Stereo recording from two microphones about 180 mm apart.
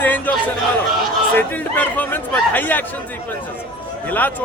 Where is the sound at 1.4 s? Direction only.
10° left (ahead or behind).